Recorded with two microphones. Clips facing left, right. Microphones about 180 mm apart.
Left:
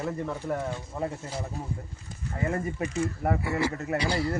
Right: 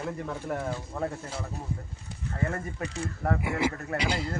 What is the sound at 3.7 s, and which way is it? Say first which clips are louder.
Speech: left 4 dB; 20° left (ahead or behind).